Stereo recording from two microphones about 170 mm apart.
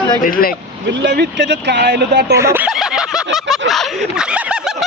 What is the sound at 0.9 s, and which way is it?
Speech, 90° right.